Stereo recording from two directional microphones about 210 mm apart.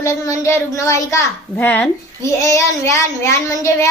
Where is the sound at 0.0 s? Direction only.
15° left (ahead or behind).